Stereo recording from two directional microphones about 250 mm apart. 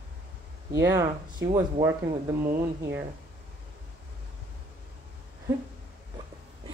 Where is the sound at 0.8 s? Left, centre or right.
Centre.